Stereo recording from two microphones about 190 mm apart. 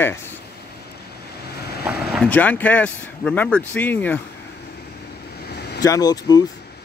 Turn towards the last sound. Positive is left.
turn(degrees=20)  # may be behind; listen again after turning